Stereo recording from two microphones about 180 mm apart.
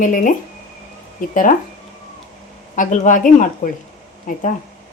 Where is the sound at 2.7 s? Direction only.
45° left (ahead or behind).